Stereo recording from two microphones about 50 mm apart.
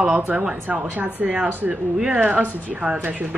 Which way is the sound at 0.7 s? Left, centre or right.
Right.